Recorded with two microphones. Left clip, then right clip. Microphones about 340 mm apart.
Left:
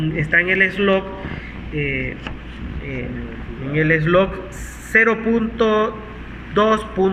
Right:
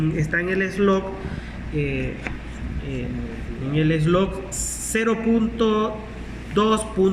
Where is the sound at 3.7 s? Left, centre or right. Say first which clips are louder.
Left 6 dB; centre.